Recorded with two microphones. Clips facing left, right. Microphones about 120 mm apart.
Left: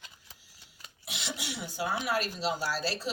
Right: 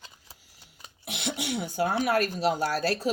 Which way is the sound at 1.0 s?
55° right (ahead or behind).